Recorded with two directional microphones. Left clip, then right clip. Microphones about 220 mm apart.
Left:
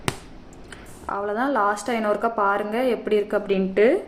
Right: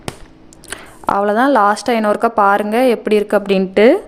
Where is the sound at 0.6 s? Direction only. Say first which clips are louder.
Right 13 dB; 50° right (ahead or behind).